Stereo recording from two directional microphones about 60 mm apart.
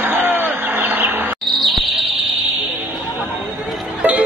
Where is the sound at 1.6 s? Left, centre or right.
Centre.